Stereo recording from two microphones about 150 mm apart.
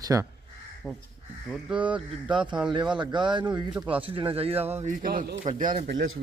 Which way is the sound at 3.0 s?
30° right (ahead or behind).